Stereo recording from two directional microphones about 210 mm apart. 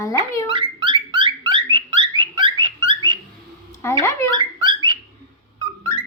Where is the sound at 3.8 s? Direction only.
15° left (ahead or behind).